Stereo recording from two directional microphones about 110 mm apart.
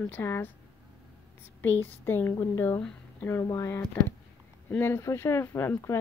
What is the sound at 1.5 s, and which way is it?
Speech, 20° left (ahead or behind).